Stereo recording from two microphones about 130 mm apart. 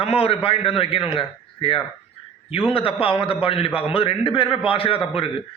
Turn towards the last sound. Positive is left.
turn(degrees=45)  # may be behind; listen again after turning